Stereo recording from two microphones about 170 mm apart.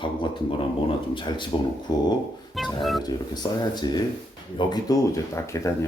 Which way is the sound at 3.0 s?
25° left (ahead or behind).